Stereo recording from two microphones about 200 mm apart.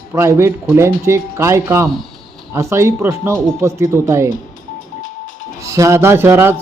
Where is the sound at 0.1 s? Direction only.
15° right (ahead or behind).